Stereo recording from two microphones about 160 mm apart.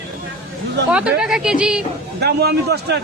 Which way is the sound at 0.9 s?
5° right (ahead or behind).